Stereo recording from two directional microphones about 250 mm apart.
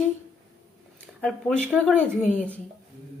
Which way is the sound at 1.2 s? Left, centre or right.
Centre.